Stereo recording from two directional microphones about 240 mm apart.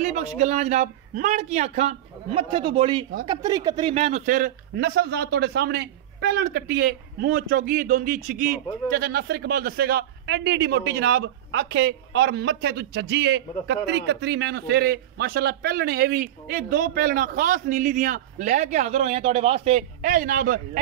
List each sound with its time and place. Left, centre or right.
0.0 s a man's voice: right